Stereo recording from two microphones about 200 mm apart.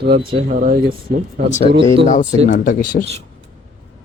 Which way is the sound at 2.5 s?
50° left (ahead or behind).